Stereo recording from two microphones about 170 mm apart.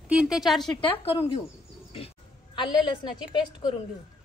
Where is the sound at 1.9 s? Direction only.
35° left (ahead or behind).